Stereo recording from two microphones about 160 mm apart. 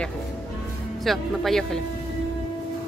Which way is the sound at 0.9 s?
Centre (ahead or behind).